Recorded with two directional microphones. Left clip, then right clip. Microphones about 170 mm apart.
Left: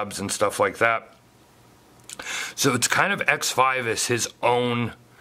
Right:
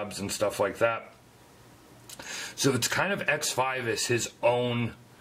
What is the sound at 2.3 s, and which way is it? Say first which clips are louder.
A man's voice: left 5 dB; 25° left (ahead or behind).